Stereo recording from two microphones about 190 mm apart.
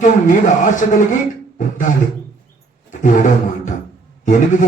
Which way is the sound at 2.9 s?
40° left (ahead or behind).